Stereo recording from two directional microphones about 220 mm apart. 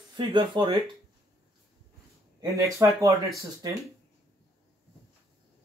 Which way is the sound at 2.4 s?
15° right (ahead or behind).